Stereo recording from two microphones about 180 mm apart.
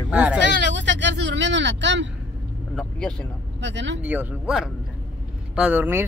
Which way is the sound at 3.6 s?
80° right.